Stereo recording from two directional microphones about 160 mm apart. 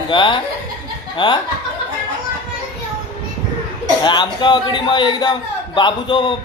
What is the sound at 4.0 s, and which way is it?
A man's voice, 30° left (ahead or behind).